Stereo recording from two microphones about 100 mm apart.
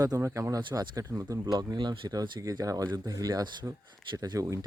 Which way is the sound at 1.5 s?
45° right (ahead or behind).